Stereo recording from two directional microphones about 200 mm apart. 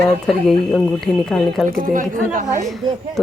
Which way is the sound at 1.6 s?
45° right (ahead or behind).